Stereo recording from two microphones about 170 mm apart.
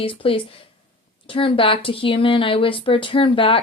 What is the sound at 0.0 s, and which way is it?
Speech, 30° left (ahead or behind).